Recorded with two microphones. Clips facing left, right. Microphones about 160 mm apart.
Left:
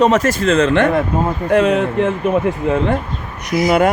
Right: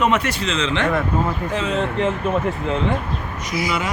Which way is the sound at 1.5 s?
65° left (ahead or behind).